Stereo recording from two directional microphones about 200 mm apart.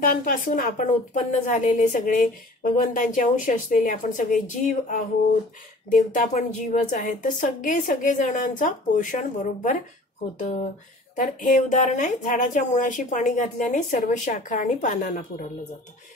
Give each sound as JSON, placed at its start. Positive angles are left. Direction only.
{"t": 0.0, "sound": "a woman's voice", "side_deg": 45}
{"t": 11.1, "sound": "a woman's voice", "side_deg": 40}